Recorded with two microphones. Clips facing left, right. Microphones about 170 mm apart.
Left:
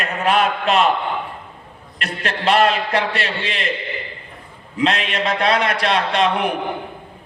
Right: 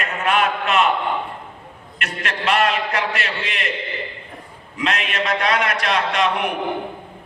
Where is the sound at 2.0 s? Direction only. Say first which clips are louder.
Left 3 dB; 35° left (ahead or behind).